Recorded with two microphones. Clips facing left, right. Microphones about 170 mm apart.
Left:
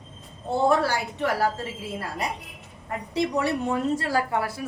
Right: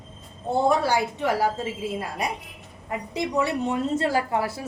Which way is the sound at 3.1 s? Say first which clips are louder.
Left 1 dB; 20° right (ahead or behind).